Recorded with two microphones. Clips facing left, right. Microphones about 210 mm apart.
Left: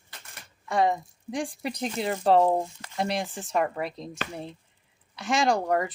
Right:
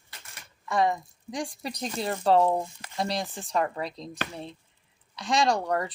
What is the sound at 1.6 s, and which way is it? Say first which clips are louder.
Speech: left 3 dB; 60° left (ahead or behind).